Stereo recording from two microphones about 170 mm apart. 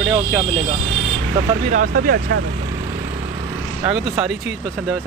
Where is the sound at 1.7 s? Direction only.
55° right (ahead or behind).